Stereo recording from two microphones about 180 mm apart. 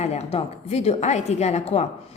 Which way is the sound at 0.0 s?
35° left (ahead or behind).